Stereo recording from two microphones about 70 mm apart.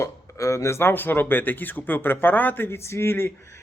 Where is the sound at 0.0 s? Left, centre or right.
Left.